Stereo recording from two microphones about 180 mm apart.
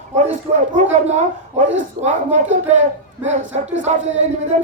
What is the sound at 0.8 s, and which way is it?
Speech, 40° right (ahead or behind).